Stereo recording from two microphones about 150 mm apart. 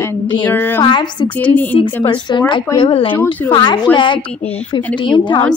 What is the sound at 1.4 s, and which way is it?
Speech, 10° left (ahead or behind).